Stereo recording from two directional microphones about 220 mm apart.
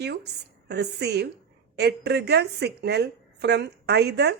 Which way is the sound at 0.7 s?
50° right (ahead or behind).